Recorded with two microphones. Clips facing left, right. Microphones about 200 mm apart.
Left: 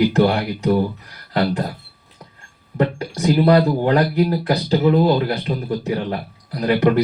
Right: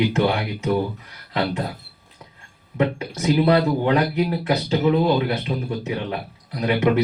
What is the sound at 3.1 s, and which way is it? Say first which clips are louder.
Speech: left 3 dB; 35° left (ahead or behind).